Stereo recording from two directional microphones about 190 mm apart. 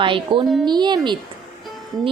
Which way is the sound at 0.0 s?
25° right (ahead or behind).